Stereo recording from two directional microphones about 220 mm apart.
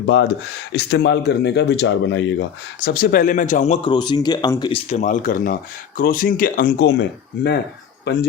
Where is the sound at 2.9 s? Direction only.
40° left (ahead or behind).